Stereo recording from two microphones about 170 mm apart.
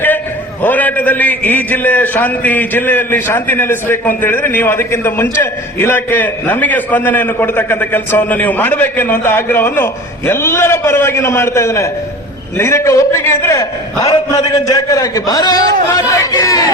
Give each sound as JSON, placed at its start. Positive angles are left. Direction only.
{"t": 0.6, "sound": "a man's voice", "side_deg": 10}